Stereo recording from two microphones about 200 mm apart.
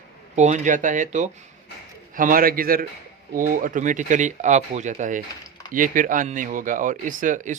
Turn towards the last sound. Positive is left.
turn(degrees=-40)  # may be behind; listen again after turning